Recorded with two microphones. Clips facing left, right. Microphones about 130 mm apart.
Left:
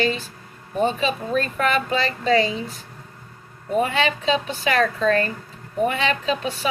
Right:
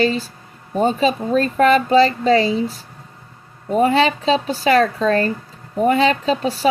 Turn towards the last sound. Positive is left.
turn(degrees=-35)  # may be behind; listen again after turning